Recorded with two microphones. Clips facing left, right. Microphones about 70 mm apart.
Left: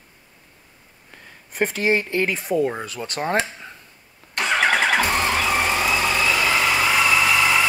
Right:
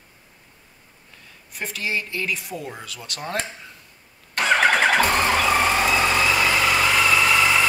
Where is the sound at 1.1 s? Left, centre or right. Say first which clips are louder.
Left 4 dB; left.